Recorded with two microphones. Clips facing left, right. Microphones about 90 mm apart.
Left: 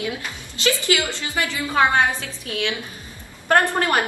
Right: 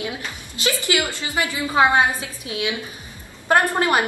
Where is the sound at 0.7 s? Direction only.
20° right (ahead or behind).